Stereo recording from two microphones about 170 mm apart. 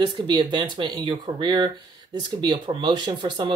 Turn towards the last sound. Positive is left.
turn(degrees=-25)  # may be behind; listen again after turning